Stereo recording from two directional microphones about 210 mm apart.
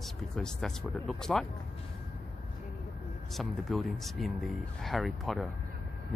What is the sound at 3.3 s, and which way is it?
Speech, centre (ahead or behind).